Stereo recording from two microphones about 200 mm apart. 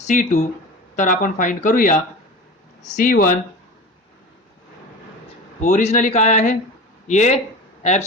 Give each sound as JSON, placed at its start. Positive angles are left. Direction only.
{"t": 0.0, "sound": "speech", "side_deg": 35}
{"t": 5.5, "sound": "speech", "side_deg": 35}